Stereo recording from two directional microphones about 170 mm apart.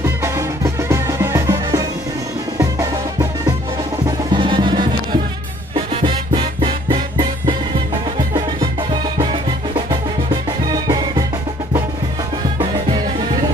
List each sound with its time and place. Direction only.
0.0 s music: 15° right (ahead or behind)
10.7 s music: 25° right (ahead or behind)
12.5 s music: 25° right (ahead or behind)